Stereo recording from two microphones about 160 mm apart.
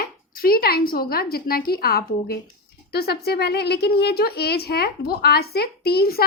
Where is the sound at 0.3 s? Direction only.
70° left (ahead or behind).